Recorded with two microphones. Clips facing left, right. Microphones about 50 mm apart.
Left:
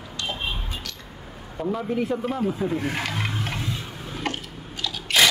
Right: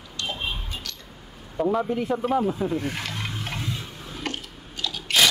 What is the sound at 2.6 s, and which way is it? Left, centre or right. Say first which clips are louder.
Speech: left 1 dB; centre.